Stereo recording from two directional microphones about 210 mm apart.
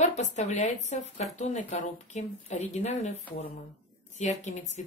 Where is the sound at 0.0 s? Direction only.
35° left (ahead or behind).